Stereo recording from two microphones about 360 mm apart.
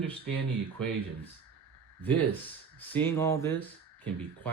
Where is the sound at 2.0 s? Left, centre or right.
Centre.